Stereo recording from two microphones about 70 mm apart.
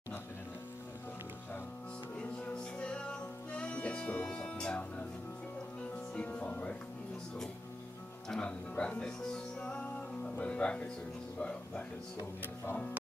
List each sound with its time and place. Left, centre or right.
2.8 s music: centre
6.1 s music: centre
8.3 s music: centre